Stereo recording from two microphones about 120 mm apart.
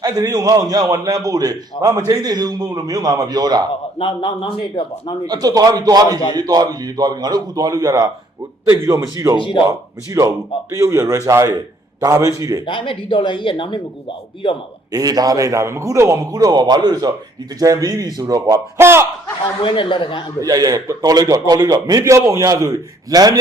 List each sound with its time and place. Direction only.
0.2 s a man's voice: 30° right (ahead or behind)
3.9 s a man's voice: 45° left (ahead or behind)
5.2 s a man's voice: 30° right (ahead or behind)
9.4 s a man's voice: 45° left (ahead or behind)
9.6 s a man's voice: 25° right (ahead or behind)
12.6 s a man's voice: 45° left (ahead or behind)
14.9 s a man's voice: 30° right (ahead or behind)
19.6 s a man's voice: 45° left (ahead or behind)
20.4 s a man's voice: 30° right (ahead or behind)